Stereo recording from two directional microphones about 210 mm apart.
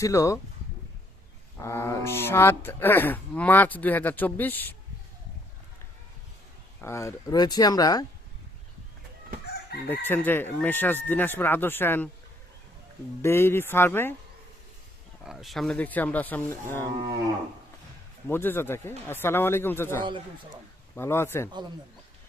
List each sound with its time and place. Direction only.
0.0 s speech: 15° left (ahead or behind)
1.5 s speech: 10° left (ahead or behind)
6.8 s speech: 15° left (ahead or behind)
9.9 s speech: 10° left (ahead or behind)
13.2 s speech: 10° left (ahead or behind)
15.2 s speech: centre (ahead or behind)
18.3 s speech: 10° left (ahead or behind)